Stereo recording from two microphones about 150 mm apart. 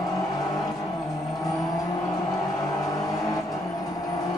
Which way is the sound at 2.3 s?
25° left (ahead or behind).